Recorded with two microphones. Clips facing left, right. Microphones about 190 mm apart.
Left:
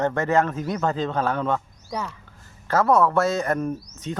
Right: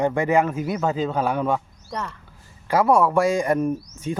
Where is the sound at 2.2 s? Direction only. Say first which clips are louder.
Even; 10° right (ahead or behind).